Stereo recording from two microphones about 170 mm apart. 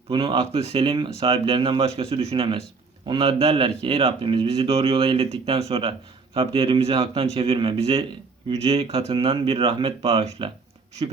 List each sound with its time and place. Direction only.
0.1 s speech: 30° right (ahead or behind)